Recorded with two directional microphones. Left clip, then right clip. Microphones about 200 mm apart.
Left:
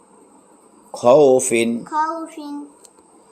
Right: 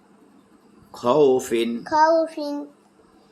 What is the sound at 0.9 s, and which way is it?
Speech, 15° left (ahead or behind).